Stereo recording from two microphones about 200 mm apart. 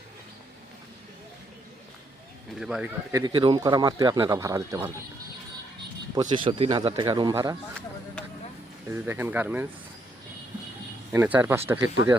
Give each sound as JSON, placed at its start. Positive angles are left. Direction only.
{"t": 2.6, "sound": "speech", "side_deg": -5}
{"t": 6.1, "sound": "speech", "side_deg": -25}
{"t": 8.9, "sound": "speech", "side_deg": -10}
{"t": 11.1, "sound": "speech", "side_deg": -10}